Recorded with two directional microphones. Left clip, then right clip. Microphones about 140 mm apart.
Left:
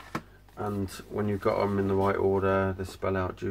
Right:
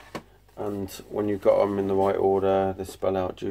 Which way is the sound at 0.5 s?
Centre (ahead or behind).